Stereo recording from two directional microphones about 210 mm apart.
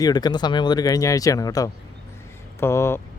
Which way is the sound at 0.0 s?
20° left (ahead or behind).